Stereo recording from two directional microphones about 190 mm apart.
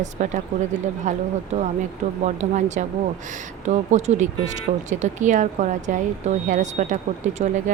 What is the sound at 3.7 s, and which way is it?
A woman's voice, 40° right (ahead or behind).